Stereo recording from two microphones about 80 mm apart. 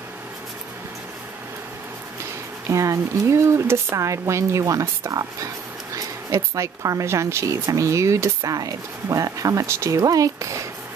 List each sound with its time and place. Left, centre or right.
2.7 s speech: right